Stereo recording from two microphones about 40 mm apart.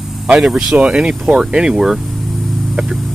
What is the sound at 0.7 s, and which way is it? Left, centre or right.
Speech, right.